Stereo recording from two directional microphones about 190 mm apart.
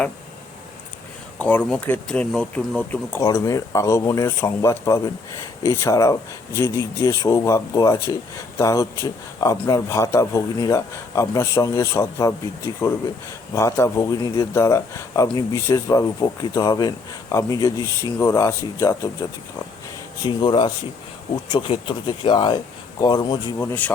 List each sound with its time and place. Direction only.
1.4 s a man's voice: 5° left (ahead or behind)